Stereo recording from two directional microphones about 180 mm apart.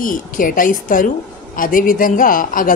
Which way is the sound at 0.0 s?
50° left (ahead or behind).